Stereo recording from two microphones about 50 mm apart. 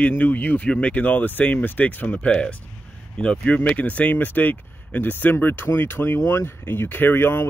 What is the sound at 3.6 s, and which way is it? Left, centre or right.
Speech, left.